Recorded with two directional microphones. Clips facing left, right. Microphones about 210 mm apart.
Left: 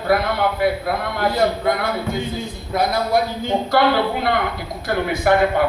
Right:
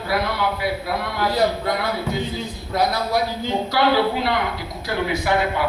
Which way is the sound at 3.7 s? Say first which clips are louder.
Left 1 dB; 55° left (ahead or behind).